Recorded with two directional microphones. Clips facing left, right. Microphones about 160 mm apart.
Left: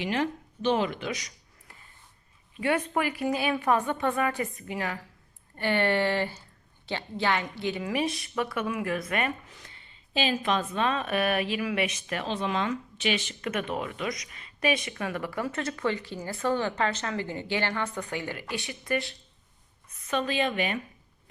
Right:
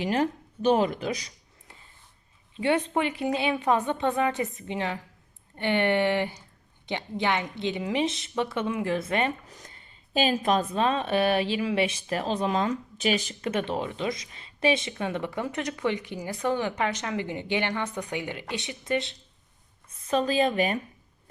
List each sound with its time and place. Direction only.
0.0 s speech: 40° right (ahead or behind)
9.5 s speech: 40° right (ahead or behind); by 19.1 s 20° right (ahead or behind)
20.1 s a woman's voice: 35° right (ahead or behind)